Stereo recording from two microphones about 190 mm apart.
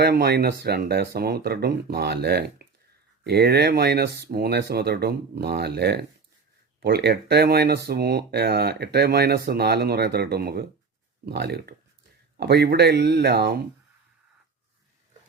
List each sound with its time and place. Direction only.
0.0 s speech: 55° right (ahead or behind)